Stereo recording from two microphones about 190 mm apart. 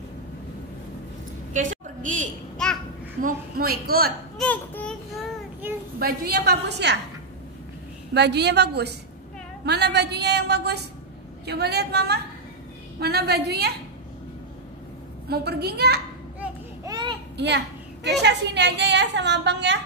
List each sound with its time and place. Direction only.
2.0 s a sound: 40° right (ahead or behind)
2.5 s babbling: 5° left (ahead or behind)
3.2 s a woman's voice: 50° right (ahead or behind)
4.4 s speech: 5° left (ahead or behind)
5.9 s a woman's voice: 55° right (ahead or behind)
8.1 s a woman's voice: 60° right (ahead or behind)
15.2 s a woman's voice: 60° right (ahead or behind)
16.8 s a sound: 25° right (ahead or behind)
17.4 s a sound: 65° right (ahead or behind)
18.2 s a woman's voice: 65° right (ahead or behind)